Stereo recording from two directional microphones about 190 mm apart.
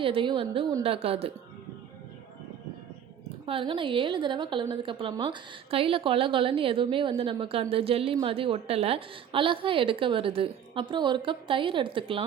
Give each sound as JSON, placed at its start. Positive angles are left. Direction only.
{"t": 0.0, "sound": "a woman's voice", "side_deg": -25}
{"t": 3.4, "sound": "a woman's voice", "side_deg": -30}